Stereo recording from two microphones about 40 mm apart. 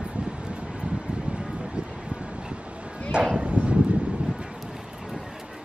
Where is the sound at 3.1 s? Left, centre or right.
Right.